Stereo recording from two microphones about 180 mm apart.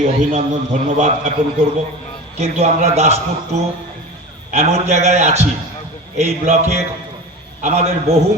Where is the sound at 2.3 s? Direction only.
35° right (ahead or behind).